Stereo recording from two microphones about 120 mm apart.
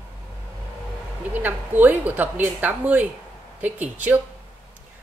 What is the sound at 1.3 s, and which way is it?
Speech, 15° right (ahead or behind).